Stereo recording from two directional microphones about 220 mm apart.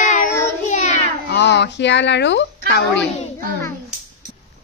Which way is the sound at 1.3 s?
50° left (ahead or behind).